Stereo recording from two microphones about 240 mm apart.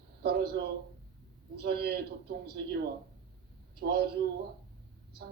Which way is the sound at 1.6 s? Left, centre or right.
Right.